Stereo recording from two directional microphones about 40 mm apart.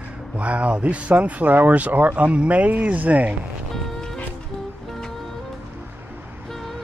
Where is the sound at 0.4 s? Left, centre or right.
Right.